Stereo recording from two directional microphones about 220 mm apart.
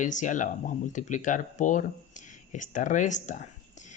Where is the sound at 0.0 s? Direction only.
35° left (ahead or behind).